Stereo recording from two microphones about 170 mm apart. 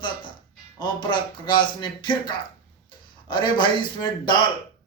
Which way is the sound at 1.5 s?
25° left (ahead or behind).